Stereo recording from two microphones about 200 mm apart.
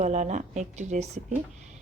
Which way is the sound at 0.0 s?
35° right (ahead or behind).